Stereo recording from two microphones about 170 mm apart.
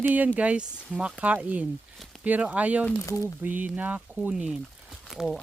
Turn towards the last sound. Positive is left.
turn(degrees=0)  # may be behind; listen again after turning